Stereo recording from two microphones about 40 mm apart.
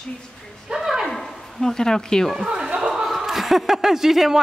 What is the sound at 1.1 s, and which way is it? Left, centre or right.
Bow-wow, centre.